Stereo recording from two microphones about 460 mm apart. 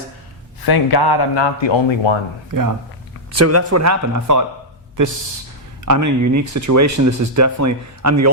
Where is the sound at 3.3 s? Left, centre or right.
Right.